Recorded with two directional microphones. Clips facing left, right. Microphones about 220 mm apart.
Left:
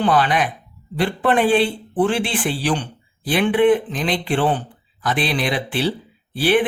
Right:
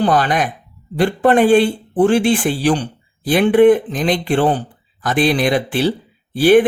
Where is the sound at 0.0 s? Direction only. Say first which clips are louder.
Right 2 dB; 45° right (ahead or behind).